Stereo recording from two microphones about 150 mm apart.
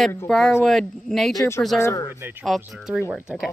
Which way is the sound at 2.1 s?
15° right (ahead or behind).